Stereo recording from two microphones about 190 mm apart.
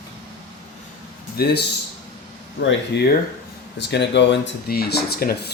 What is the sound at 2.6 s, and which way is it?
Speech, 75° left (ahead or behind).